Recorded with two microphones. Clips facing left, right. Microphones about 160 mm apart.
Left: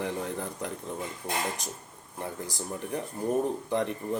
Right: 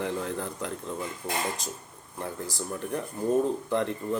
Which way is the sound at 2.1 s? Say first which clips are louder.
Right 1 dB; 15° left (ahead or behind).